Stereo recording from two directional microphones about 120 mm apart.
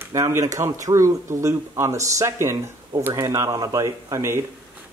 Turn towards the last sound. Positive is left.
turn(degrees=-20)  # may be behind; listen again after turning